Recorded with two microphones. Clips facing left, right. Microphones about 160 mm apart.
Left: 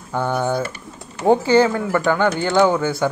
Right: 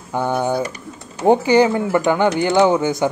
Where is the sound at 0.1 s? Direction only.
15° right (ahead or behind).